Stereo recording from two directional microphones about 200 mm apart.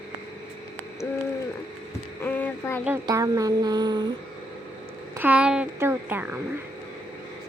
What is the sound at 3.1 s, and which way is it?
A woman's voice, 15° right (ahead or behind).